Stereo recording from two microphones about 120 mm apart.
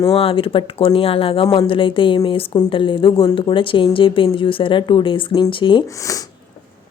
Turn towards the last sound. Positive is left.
turn(degrees=45)  # may be behind; listen again after turning